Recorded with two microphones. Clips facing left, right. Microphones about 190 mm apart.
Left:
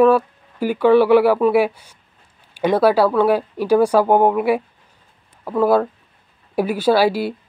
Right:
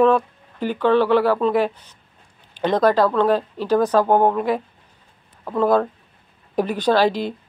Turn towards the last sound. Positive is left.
turn(degrees=10)  # may be behind; listen again after turning